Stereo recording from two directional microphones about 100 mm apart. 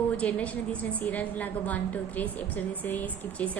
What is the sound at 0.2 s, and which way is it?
A woman's voice, 15° left (ahead or behind).